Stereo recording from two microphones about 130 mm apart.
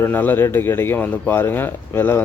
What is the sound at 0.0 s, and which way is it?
Speech, 15° left (ahead or behind).